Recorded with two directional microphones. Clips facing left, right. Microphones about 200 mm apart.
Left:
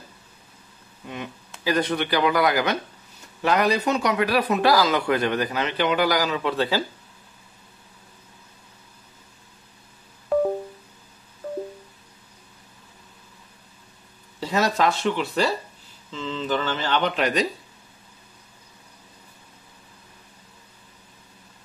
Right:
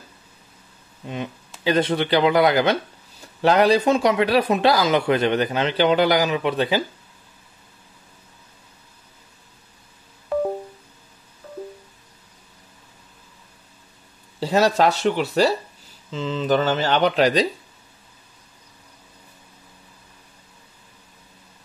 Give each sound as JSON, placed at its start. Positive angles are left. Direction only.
{"t": 1.0, "sound": "speech", "side_deg": -25}
{"t": 14.4, "sound": "speech", "side_deg": -30}